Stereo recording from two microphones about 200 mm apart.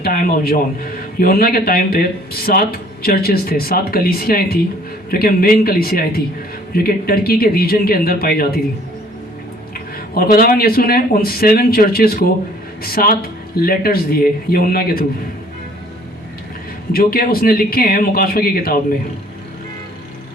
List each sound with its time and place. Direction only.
0.0 s a man's voice: 45° left (ahead or behind)
9.7 s a man's voice: 45° left (ahead or behind)
16.9 s a man's voice: 50° left (ahead or behind)